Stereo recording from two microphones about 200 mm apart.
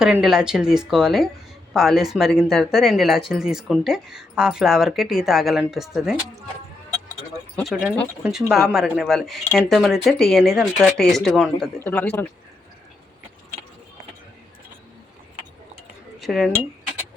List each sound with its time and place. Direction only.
0.0 s speech: centre (ahead or behind)
7.5 s speech: centre (ahead or behind)
11.8 s speech: 10° left (ahead or behind)
16.2 s speech: centre (ahead or behind)